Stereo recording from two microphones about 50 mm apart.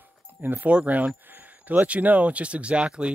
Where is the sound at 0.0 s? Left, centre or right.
Right.